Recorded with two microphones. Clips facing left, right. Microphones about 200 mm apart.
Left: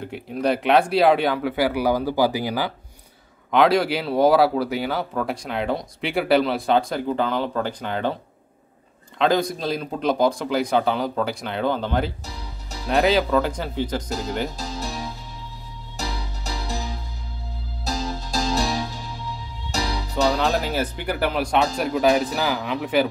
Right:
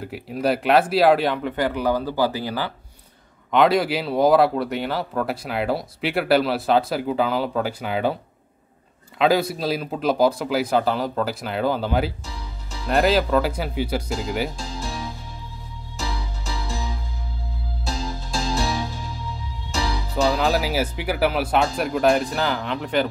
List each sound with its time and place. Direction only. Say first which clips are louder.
0.0 s speech: even; 5° right (ahead or behind); by 2.7 s 15° left (ahead or behind)
3.5 s speech: even; centre (ahead or behind)
9.2 s speech: right 1 dB; 5° right (ahead or behind)
16.0 s music: even; 40° left (ahead or behind)
17.8 s music: left 2 dB; 40° left (ahead or behind)
19.7 s music: even; 35° left (ahead or behind)
20.2 s speech: right 1 dB; 5° right (ahead or behind)